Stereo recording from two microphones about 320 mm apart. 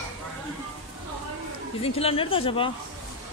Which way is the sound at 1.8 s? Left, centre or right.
Centre.